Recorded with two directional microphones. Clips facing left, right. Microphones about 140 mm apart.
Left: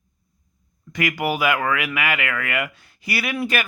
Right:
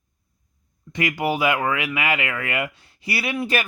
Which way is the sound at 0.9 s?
30° right (ahead or behind).